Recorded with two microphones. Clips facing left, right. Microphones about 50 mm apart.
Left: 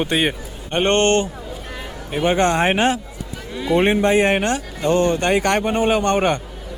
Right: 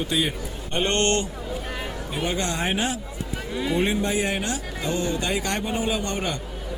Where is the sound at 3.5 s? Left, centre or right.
Centre.